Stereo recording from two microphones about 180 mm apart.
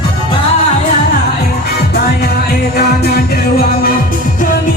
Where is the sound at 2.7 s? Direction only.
60° left (ahead or behind).